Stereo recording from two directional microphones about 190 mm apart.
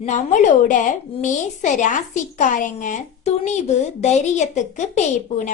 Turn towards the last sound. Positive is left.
turn(degrees=40)  # may be behind; listen again after turning